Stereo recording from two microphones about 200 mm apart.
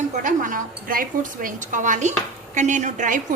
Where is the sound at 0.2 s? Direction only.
40° right (ahead or behind).